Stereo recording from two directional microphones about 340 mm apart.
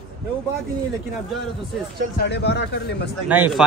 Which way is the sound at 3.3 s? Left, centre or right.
Centre.